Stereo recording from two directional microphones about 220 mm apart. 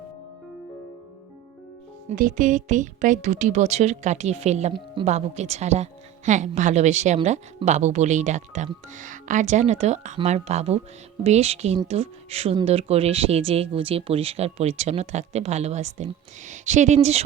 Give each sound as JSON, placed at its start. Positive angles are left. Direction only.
{"t": 2.0, "sound": "a woman's voice", "side_deg": -35}